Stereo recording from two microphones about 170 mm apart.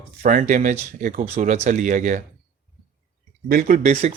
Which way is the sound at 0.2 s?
45° right (ahead or behind).